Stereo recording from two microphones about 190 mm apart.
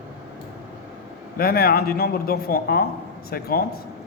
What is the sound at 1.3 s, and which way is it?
Speech, 55° left (ahead or behind).